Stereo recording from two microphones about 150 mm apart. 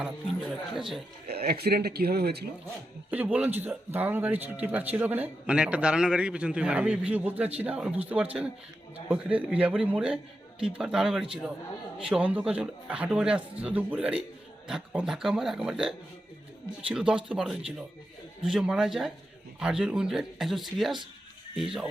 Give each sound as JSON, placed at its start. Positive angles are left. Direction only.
{"t": 0.0, "sound": "a sound", "side_deg": 0}
{"t": 1.3, "sound": "speech", "side_deg": -90}
{"t": 3.1, "sound": "speech", "side_deg": -10}